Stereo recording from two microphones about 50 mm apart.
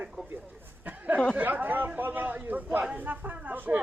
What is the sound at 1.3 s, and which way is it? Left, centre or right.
Chatter, right.